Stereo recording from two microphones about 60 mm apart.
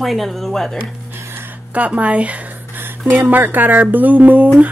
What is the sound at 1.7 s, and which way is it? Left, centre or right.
Speech, right.